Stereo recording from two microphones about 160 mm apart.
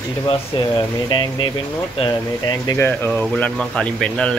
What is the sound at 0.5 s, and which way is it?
Speech, 30° left (ahead or behind).